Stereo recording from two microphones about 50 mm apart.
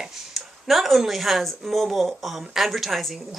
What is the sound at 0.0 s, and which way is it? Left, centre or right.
Speech, centre.